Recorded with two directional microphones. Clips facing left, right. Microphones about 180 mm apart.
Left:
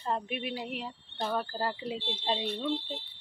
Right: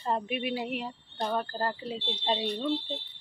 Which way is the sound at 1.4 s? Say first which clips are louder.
Right 1 dB; 10° left (ahead or behind).